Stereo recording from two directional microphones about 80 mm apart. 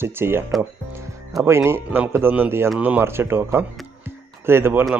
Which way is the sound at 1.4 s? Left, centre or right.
Right.